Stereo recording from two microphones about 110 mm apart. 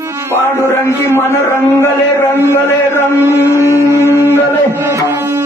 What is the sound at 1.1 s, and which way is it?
A man's voice, 25° left (ahead or behind).